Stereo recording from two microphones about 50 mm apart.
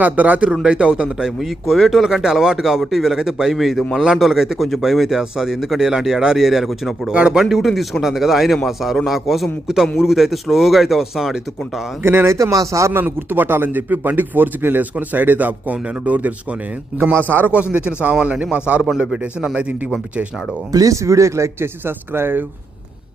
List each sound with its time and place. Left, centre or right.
0.0 s a man's voice: right
1.4 s a man's voice: centre
7.1 s a man's voice: right
7.3 s speech: centre
12.0 s speech: right
12.9 s a man's voice: right
17.0 s speech: right
17.4 s a man's voice: right
20.9 s speech: right
21.8 s speech: right